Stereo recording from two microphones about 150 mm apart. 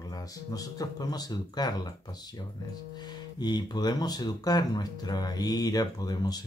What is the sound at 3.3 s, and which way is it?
Speech, 30° left (ahead or behind).